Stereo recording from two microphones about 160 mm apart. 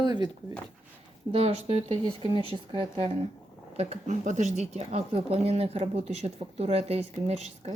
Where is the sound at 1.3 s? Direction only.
40° right (ahead or behind).